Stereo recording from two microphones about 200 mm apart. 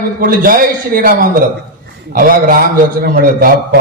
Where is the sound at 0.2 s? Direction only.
45° right (ahead or behind).